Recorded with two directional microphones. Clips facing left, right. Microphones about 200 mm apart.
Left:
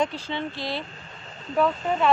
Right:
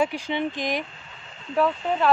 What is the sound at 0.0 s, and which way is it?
Speech, 15° right (ahead or behind).